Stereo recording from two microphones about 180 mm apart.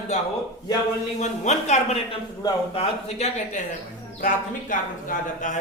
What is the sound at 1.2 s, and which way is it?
A man's voice, 40° left (ahead or behind).